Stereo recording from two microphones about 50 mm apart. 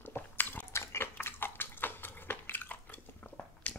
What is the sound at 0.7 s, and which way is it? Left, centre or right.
Dog, left.